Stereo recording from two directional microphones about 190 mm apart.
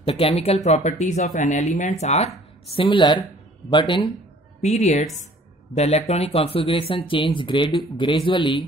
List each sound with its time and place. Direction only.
0.0 s speech: 30° left (ahead or behind)
4.6 s speech: 35° left (ahead or behind)